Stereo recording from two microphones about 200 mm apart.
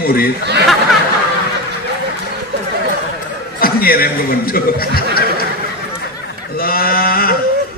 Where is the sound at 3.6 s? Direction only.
50° left (ahead or behind).